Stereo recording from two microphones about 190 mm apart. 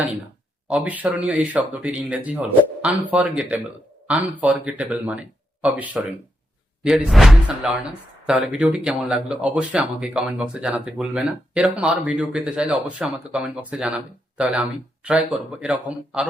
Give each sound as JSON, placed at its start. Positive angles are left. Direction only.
{"t": 0.7, "sound": "speech", "side_deg": -10}